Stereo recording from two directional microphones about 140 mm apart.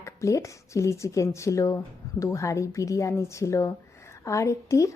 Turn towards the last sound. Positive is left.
turn(degrees=20)  # may be behind; listen again after turning